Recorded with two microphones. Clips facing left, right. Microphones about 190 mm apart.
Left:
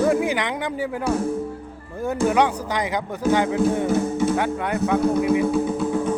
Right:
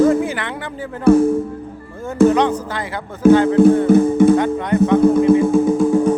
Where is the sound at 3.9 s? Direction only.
55° right (ahead or behind).